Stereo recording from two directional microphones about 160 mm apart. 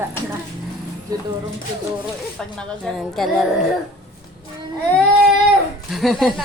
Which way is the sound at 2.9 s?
Centre (ahead or behind).